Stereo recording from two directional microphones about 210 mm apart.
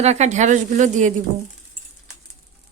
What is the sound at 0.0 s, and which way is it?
Speech, 30° right (ahead or behind).